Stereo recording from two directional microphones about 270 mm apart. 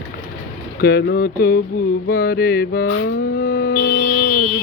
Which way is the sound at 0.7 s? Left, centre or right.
Left.